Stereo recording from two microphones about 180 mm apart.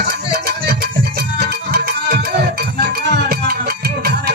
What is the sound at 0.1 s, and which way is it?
Music, 60° right (ahead or behind).